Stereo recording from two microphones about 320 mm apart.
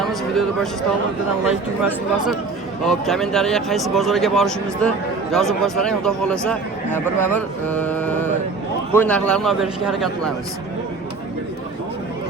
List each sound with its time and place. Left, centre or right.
0.0 s speech: centre
7.2 s carnatic music: centre
8.9 s speech: centre